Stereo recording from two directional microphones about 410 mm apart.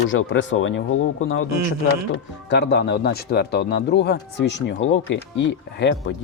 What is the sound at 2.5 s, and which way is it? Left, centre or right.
Speech, left.